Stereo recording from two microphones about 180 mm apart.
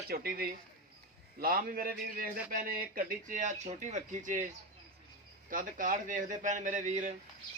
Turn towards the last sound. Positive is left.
turn(degrees=-40)  # may be behind; listen again after turning